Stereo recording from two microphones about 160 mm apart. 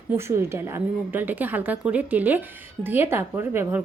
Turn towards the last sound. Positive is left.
turn(degrees=-15)  # may be behind; listen again after turning